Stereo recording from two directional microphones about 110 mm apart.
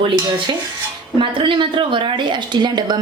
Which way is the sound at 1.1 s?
50° right (ahead or behind).